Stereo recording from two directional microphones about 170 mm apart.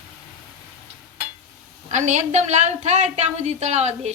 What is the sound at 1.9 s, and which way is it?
A woman's voice, 45° right (ahead or behind).